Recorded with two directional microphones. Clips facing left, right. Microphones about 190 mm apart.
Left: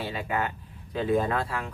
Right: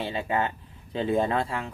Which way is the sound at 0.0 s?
25° right (ahead or behind).